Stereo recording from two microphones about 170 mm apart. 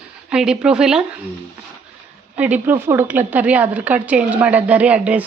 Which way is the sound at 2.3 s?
10° right (ahead or behind).